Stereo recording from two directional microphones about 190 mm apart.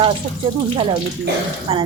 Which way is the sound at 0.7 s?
25° right (ahead or behind).